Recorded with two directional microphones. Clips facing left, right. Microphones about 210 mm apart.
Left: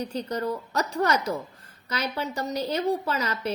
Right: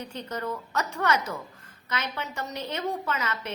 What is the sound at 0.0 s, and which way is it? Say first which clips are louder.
A woman's voice: left 5 dB; 35° left (ahead or behind).